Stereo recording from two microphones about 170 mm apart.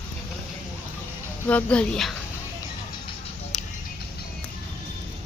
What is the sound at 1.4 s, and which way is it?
Speech, 5° left (ahead or behind).